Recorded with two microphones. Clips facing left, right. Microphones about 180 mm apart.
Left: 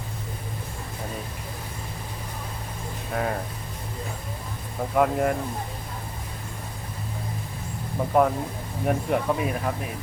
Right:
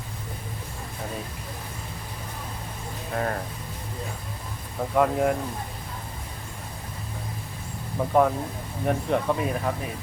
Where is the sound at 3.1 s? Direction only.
5° left (ahead or behind).